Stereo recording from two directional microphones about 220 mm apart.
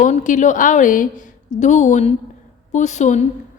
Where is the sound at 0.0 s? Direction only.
35° left (ahead or behind).